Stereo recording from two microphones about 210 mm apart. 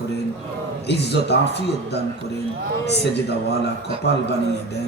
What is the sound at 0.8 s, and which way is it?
Speech, 55° left (ahead or behind).